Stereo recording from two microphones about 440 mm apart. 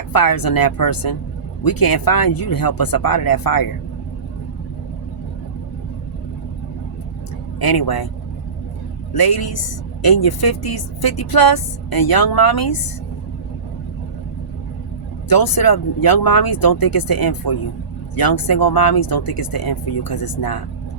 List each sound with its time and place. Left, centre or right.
0.1 s a woman's voice: left
7.6 s a woman's voice: left
9.1 s a woman's voice: left
15.3 s a woman's voice: left